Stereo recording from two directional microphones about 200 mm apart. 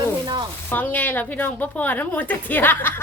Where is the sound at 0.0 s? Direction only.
20° right (ahead or behind).